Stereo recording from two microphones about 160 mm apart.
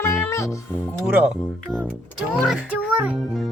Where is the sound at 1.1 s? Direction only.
5° right (ahead or behind).